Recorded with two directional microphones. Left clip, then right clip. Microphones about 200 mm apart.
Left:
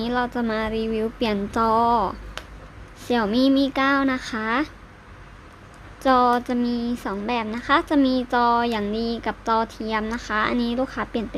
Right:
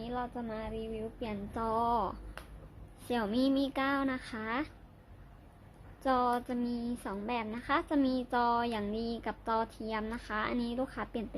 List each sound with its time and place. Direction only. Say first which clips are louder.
0.0 s a woman's voice: left 14 dB; 20° left (ahead or behind)
6.0 s a woman's voice: left 12 dB; 10° left (ahead or behind)